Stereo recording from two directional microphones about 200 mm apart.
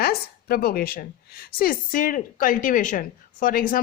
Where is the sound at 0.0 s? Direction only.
50° left (ahead or behind).